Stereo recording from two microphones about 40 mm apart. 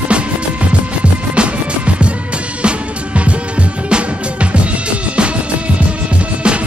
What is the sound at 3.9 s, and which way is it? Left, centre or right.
Music, right.